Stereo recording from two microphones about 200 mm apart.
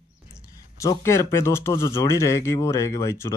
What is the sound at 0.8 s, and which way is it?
Speech, 15° left (ahead or behind).